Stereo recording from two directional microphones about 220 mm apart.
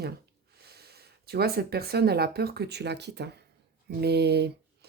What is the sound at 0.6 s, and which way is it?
Speech, 45° right (ahead or behind).